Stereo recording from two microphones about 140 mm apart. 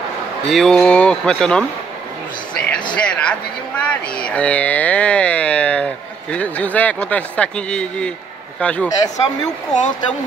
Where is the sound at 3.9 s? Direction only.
5° left (ahead or behind).